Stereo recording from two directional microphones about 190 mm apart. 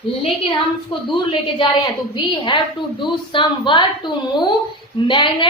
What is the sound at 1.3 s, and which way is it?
Speech, 30° left (ahead or behind).